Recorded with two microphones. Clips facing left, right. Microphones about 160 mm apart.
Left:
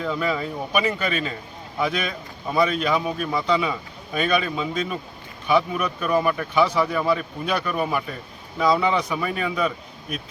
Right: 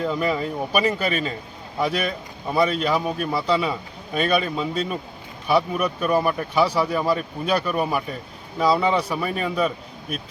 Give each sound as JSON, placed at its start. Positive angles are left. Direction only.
{"t": 0.1, "sound": "speech", "side_deg": -10}
{"t": 2.5, "sound": "speech", "side_deg": -5}